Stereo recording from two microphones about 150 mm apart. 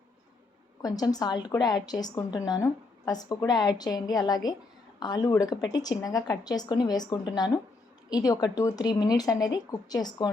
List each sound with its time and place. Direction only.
0.8 s a woman's voice: 25° left (ahead or behind)